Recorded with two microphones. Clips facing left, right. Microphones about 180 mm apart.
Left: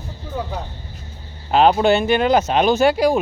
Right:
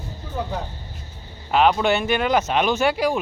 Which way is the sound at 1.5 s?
30° left (ahead or behind).